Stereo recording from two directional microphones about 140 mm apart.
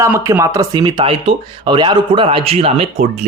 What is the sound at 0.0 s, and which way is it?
Speech, 20° right (ahead or behind).